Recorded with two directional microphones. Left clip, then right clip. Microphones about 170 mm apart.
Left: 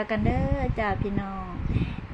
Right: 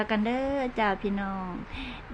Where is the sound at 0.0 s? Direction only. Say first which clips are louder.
Even; 15° right (ahead or behind).